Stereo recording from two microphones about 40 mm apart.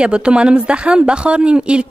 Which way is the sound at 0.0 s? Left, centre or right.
Right.